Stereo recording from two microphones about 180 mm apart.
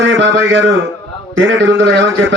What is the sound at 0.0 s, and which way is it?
A man's voice, 90° right.